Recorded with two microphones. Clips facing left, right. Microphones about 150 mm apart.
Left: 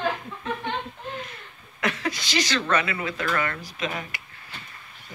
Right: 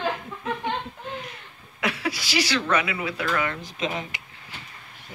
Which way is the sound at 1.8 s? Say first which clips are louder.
Even; 10° right (ahead or behind).